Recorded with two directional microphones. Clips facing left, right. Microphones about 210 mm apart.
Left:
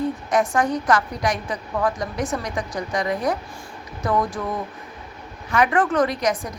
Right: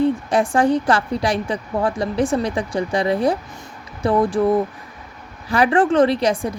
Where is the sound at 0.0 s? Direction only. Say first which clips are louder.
Right 4 dB; 30° right (ahead or behind).